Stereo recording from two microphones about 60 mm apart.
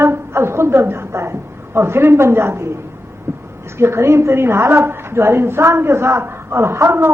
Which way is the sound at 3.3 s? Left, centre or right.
Right.